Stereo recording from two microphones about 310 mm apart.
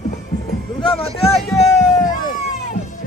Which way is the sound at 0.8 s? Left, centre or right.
Centre.